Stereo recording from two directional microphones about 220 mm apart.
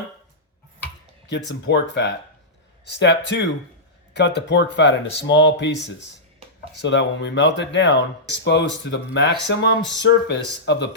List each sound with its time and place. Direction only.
1.3 s speech: 50° left (ahead or behind)